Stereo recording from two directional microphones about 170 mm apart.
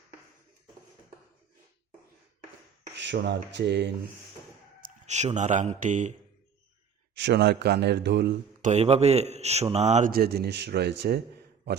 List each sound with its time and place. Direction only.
2.9 s speech: 90° right
4.8 s speech: 45° right (ahead or behind)
7.2 s speech: 85° right
8.6 s speech: 40° right (ahead or behind)
10.1 s speech: 65° right (ahead or behind)